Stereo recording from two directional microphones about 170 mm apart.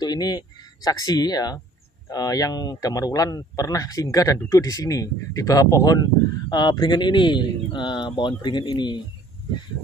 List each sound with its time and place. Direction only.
0.0 s a man's voice: 25° left (ahead or behind)